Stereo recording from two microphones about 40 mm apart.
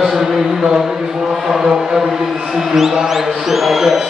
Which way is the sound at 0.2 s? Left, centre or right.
Centre.